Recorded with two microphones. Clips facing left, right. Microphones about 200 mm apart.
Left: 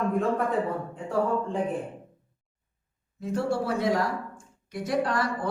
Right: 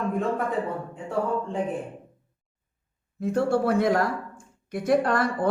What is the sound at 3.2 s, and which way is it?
A woman's voice, 55° right (ahead or behind).